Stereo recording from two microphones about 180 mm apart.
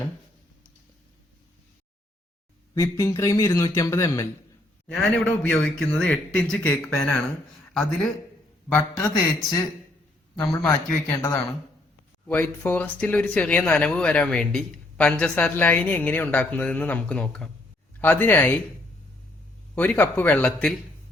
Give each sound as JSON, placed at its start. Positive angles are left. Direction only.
{"t": 2.7, "sound": "speech", "side_deg": 20}
{"t": 4.9, "sound": "a man's voice", "side_deg": 5}
{"t": 10.4, "sound": "speech", "side_deg": 15}
{"t": 19.7, "sound": "speech", "side_deg": 10}